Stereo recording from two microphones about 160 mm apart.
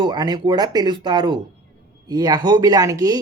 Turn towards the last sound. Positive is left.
turn(degrees=-20)  # may be behind; listen again after turning